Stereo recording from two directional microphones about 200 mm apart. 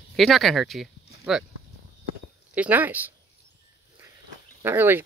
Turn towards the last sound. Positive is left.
turn(degrees=-10)  # may be behind; listen again after turning